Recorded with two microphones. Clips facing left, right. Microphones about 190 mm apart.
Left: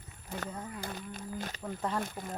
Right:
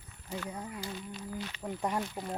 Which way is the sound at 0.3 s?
55° left (ahead or behind).